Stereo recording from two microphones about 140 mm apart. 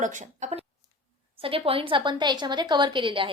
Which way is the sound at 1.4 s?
40° right (ahead or behind).